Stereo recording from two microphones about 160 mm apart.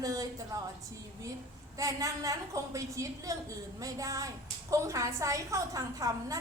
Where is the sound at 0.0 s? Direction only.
20° right (ahead or behind).